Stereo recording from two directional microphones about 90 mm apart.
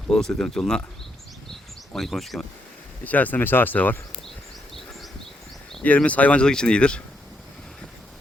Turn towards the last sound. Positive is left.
turn(degrees=10)  # may be behind; listen again after turning